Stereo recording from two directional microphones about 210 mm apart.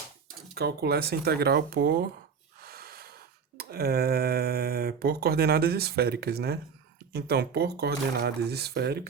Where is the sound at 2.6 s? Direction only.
45° right (ahead or behind).